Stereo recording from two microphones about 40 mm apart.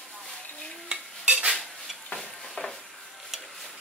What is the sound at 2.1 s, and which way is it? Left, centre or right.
Stir, centre.